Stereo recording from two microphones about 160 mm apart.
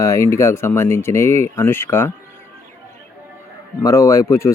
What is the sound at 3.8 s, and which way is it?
Speech, 20° left (ahead or behind).